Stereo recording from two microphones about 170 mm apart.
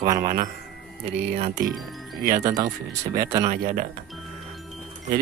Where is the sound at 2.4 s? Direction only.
20° right (ahead or behind).